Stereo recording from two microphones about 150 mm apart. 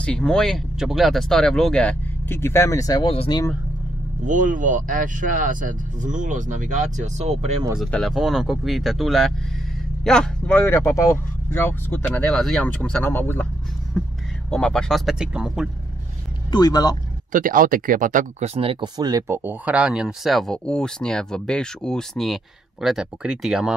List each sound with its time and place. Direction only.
0.0 s speech: 5° left (ahead or behind); by 3.1 s 25° left (ahead or behind)
3.1 s speech: 35° left (ahead or behind)
4.2 s speech: 60° right (ahead or behind)
7.8 s speech: centre (ahead or behind)
10.6 s speech: 20° left (ahead or behind)
12.3 s speech: centre (ahead or behind)
14.5 s speech: 5° left (ahead or behind)
16.5 s speech: 25° left (ahead or behind)
17.3 s speech: 65° right (ahead or behind); by 23.7 s 5° right (ahead or behind)